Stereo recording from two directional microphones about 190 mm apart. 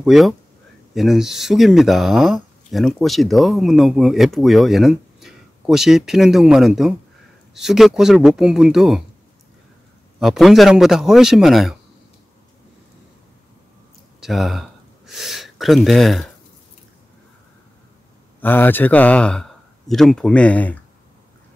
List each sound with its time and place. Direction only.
0.0 s speech: centre (ahead or behind)
10.2 s speech: centre (ahead or behind)
14.2 s gasp: centre (ahead or behind)
18.4 s speech: 10° left (ahead or behind)